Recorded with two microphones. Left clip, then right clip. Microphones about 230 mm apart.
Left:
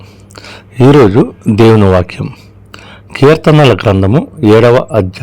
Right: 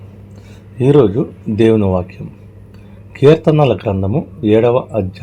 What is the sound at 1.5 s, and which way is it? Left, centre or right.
A man's voice, left.